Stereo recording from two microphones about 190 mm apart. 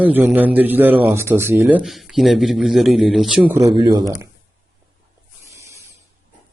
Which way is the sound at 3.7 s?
25° right (ahead or behind).